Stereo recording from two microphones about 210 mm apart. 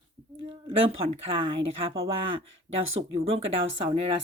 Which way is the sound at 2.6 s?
70° right (ahead or behind).